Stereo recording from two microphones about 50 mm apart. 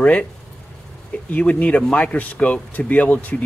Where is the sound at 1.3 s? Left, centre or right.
Left.